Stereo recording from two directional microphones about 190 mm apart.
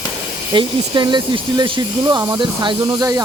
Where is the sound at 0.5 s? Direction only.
25° right (ahead or behind).